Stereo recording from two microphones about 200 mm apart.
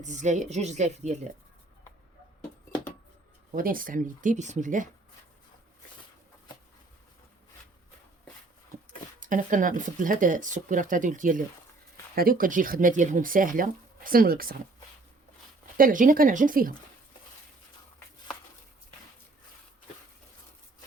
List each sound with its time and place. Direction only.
0.0 s speech: 35° right (ahead or behind)
3.5 s speech: 45° right (ahead or behind)
9.2 s speech: 40° right (ahead or behind)
15.8 s speech: 45° right (ahead or behind)